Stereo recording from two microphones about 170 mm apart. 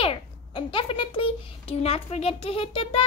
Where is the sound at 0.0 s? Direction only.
30° left (ahead or behind).